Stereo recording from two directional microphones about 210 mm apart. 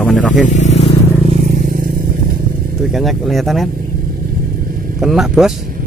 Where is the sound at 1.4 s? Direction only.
40° right (ahead or behind).